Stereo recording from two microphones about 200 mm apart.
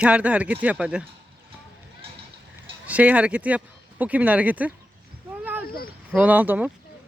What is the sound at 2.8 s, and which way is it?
Speech, 5° right (ahead or behind).